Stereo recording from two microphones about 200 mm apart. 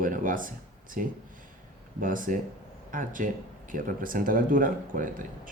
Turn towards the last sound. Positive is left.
turn(degrees=-40)  # may be behind; listen again after turning